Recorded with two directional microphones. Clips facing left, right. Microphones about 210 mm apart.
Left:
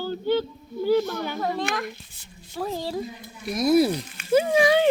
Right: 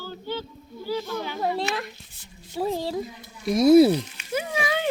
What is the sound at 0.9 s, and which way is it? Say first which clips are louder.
Speech: left 7 dB; 70° left (ahead or behind).